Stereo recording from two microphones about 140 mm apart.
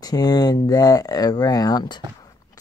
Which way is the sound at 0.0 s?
25° left (ahead or behind).